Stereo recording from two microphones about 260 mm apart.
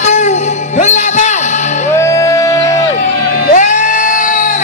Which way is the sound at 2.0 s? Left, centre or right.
Centre.